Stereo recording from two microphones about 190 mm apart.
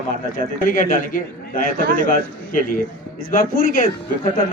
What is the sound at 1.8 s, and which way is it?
Speech, 50° right (ahead or behind).